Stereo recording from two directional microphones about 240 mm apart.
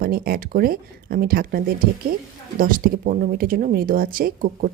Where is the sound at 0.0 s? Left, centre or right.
Right.